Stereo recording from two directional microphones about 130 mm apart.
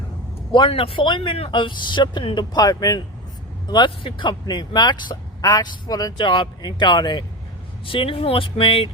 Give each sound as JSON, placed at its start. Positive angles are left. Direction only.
{"t": 0.5, "sound": "speech", "side_deg": 40}